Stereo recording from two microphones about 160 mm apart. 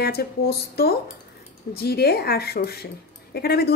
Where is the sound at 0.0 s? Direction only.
80° left.